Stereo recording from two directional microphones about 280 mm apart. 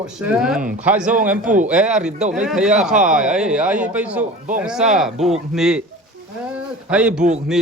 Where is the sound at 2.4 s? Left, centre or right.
Centre.